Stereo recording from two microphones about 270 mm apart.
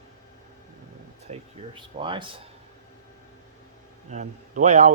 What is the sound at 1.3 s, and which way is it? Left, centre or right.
Speech, centre.